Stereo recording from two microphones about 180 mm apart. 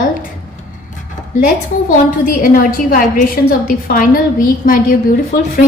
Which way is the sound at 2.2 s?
50° left (ahead or behind).